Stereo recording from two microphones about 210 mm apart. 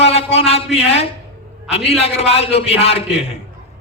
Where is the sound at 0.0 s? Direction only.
30° left (ahead or behind).